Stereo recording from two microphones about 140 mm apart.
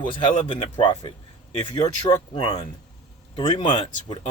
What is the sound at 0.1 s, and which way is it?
Speech, 35° left (ahead or behind).